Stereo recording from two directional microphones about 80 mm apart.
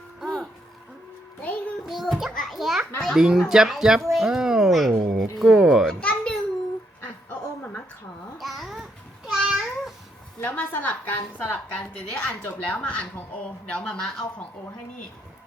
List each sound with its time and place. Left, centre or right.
0.2 s music: centre
1.4 s music: centre
1.9 s child singing: centre
2.3 s a child's voice: centre
5.9 s a sound: centre
8.4 s babbling: centre
10.4 s a woman's voice: left